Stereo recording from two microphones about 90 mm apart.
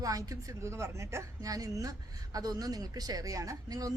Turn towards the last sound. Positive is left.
turn(degrees=-40)  # may be behind; listen again after turning